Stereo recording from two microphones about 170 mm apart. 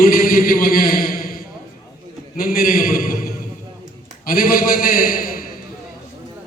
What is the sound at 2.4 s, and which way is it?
A man's voice, 60° left (ahead or behind).